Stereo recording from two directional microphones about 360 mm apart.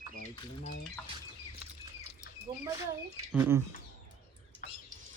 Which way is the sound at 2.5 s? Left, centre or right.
Centre.